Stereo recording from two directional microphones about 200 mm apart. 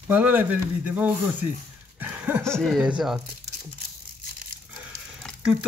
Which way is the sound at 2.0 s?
10° right (ahead or behind).